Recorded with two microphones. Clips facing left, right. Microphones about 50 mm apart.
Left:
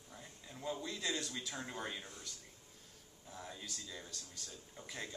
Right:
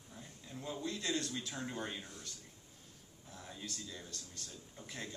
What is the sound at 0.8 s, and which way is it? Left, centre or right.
Speech, centre.